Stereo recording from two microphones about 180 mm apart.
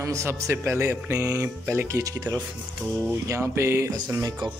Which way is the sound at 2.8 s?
10° right (ahead or behind).